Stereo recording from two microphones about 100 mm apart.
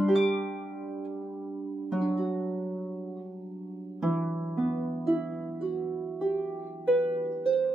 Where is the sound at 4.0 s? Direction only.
5° right (ahead or behind).